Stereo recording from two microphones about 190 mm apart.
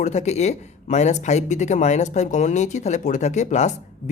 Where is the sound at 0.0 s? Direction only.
35° left (ahead or behind).